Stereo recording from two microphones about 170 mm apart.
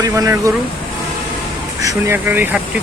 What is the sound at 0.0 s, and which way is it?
Speech, 20° right (ahead or behind).